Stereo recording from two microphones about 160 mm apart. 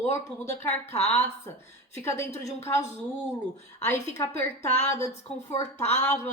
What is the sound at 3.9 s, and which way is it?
Speech, 45° left (ahead or behind).